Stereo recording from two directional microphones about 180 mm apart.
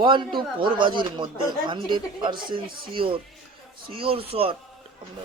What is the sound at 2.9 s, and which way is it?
Speech, 30° right (ahead or behind).